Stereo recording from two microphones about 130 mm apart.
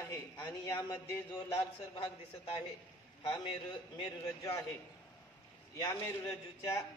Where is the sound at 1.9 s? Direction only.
45° left (ahead or behind).